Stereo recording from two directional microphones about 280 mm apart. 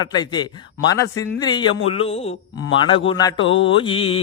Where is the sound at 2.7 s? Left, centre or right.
Centre.